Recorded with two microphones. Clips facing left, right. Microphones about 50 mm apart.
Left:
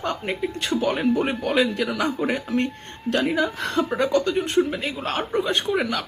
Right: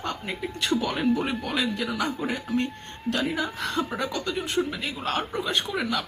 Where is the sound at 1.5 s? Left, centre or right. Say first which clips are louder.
Left 6 dB; left.